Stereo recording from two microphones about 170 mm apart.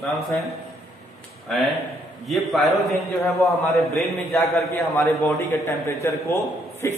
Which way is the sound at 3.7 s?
Centre (ahead or behind).